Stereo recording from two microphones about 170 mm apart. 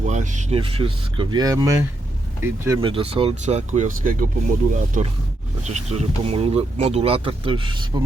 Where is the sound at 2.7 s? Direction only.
30° right (ahead or behind).